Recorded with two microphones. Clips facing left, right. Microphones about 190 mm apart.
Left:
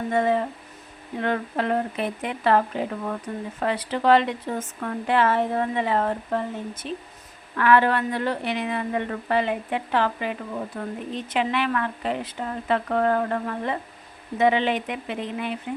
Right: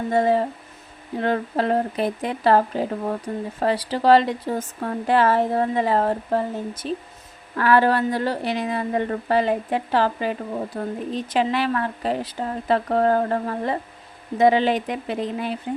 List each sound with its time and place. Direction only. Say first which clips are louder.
0.1 s speech: right 3 dB; 35° right (ahead or behind)